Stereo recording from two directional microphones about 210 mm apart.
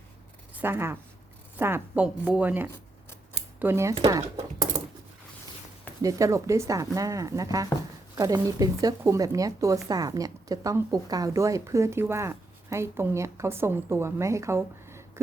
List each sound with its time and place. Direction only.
0.5 s a woman's voice: 10° right (ahead or behind)
6.0 s a woman's voice: 15° right (ahead or behind)